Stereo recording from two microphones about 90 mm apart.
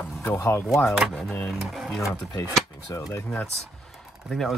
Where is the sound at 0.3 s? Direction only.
30° left (ahead or behind).